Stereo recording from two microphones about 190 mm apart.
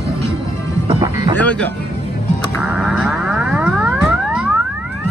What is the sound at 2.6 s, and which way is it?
Music, 5° right (ahead or behind).